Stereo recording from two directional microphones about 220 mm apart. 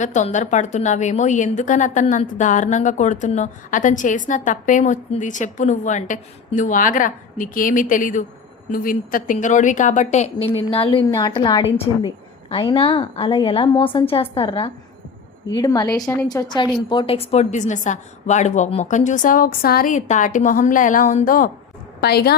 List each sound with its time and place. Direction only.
0.0 s a woman's voice: 35° left (ahead or behind)